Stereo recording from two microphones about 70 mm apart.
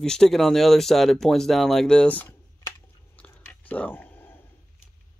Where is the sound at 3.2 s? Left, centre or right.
Left.